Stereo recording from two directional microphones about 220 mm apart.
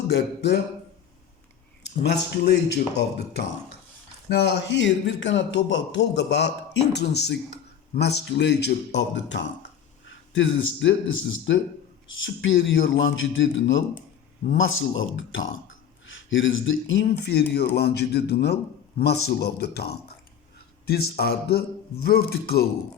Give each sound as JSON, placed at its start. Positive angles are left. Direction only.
{"t": 0.1, "sound": "a man's voice", "side_deg": 50}
{"t": 2.0, "sound": "a man's voice", "side_deg": 45}
{"t": 21.2, "sound": "a man's voice", "side_deg": 45}